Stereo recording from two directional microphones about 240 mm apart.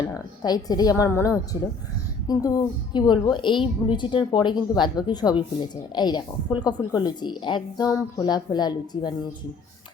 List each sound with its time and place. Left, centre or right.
0.1 s a woman's voice: centre